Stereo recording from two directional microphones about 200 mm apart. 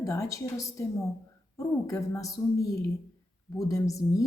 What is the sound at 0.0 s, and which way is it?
A woman's voice, 15° left (ahead or behind).